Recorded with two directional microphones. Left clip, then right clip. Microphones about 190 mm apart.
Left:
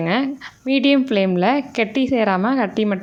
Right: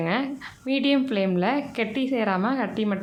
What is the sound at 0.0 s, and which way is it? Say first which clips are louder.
A woman's voice: left 5 dB; 40° left (ahead or behind).